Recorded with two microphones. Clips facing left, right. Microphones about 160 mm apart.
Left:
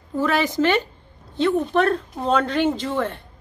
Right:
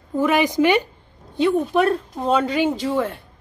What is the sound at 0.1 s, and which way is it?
Speech, 15° right (ahead or behind).